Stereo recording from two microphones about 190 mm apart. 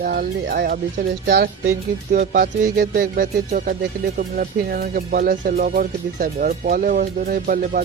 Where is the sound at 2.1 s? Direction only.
45° right (ahead or behind).